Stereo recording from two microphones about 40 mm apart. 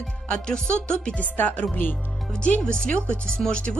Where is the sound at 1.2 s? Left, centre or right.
Left.